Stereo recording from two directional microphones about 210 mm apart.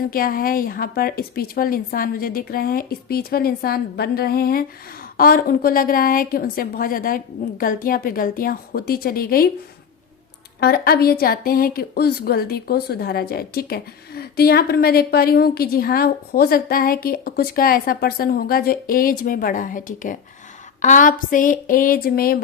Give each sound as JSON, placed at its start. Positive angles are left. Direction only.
{"t": 0.1, "sound": "a woman's voice", "side_deg": 45}
{"t": 10.6, "sound": "a woman's voice", "side_deg": 50}